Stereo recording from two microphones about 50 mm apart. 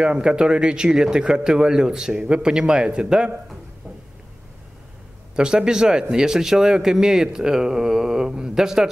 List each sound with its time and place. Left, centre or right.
0.0 s speech: centre
5.3 s speech: centre